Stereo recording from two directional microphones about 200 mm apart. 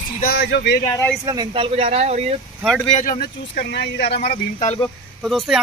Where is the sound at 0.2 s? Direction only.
55° left (ahead or behind).